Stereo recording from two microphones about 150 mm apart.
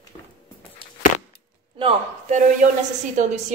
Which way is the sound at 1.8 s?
35° right (ahead or behind).